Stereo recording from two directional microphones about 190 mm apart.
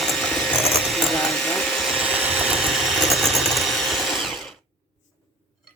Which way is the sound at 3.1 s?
Centre (ahead or behind).